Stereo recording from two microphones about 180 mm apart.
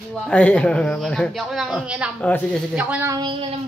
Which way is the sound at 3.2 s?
25° right (ahead or behind).